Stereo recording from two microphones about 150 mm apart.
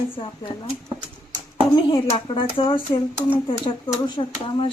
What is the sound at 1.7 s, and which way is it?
Speech, 30° left (ahead or behind).